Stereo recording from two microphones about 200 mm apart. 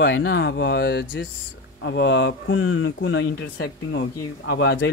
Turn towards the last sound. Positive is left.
turn(degrees=65)  # may be behind; listen again after turning